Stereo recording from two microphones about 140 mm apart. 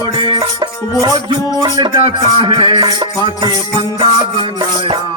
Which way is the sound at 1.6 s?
30° right (ahead or behind).